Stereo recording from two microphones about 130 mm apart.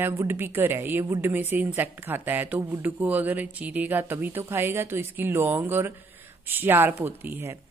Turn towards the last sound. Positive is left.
turn(degrees=-20)  # may be behind; listen again after turning